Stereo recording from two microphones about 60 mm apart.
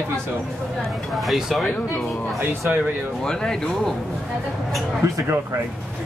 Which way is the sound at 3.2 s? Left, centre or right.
Centre.